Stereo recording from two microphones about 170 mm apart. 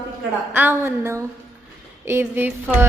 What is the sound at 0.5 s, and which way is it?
A woman's voice, 10° right (ahead or behind).